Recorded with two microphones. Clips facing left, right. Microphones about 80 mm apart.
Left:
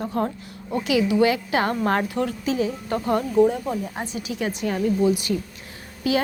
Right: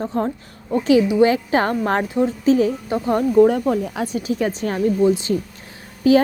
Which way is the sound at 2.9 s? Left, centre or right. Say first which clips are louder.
Right 4 dB; right.